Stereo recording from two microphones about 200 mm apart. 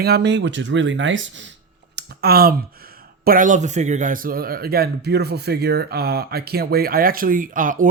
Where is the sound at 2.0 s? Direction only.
50° right (ahead or behind).